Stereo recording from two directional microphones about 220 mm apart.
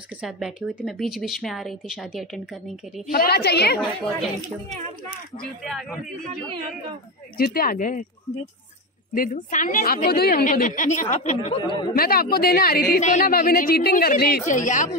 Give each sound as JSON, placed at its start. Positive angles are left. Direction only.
{"t": 0.2, "sound": "speech", "side_deg": -5}
{"t": 3.1, "sound": "speech", "side_deg": 45}
{"t": 5.4, "sound": "speech", "side_deg": 0}
{"t": 7.3, "sound": "a woman's voice", "side_deg": 45}
{"t": 9.1, "sound": "a woman's voice", "side_deg": 40}
{"t": 11.9, "sound": "speech", "side_deg": 45}